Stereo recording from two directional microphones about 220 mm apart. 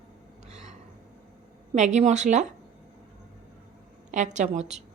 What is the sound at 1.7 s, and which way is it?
Speech, 30° right (ahead or behind).